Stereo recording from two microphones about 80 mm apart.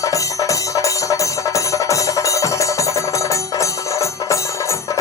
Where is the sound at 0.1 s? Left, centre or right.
Left.